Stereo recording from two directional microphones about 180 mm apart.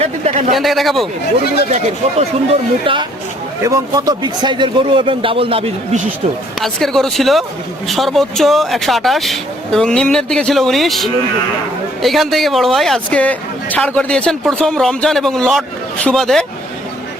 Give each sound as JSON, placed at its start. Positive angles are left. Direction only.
{"t": 0.0, "sound": "a sound", "side_deg": -40}
{"t": 0.5, "sound": "speech", "side_deg": 0}
{"t": 1.7, "sound": "a man's voice", "side_deg": -35}
{"t": 6.6, "sound": "speech", "side_deg": 0}